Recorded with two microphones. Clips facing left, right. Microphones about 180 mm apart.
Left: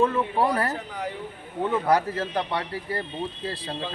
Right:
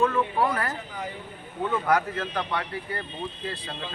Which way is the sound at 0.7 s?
70° left (ahead or behind).